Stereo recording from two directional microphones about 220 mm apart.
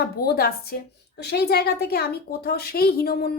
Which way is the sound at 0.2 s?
45° left (ahead or behind).